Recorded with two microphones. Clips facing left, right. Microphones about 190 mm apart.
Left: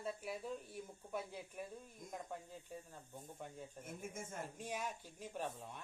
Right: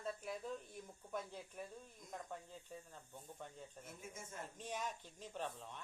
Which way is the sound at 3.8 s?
50° left (ahead or behind).